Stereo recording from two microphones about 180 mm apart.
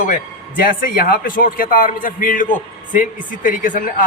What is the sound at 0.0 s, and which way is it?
Speech, 45° left (ahead or behind).